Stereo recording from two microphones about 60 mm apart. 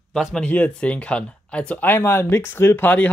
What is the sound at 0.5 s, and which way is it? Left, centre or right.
Speech, left.